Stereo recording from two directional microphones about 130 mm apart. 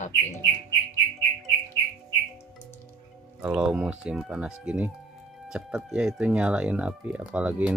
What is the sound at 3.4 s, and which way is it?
Speech, 10° right (ahead or behind).